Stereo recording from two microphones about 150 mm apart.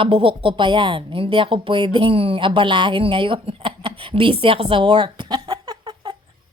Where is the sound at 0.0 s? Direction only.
35° right (ahead or behind).